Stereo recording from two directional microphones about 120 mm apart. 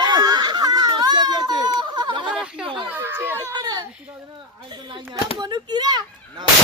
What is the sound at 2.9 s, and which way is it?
Speech, 15° right (ahead or behind).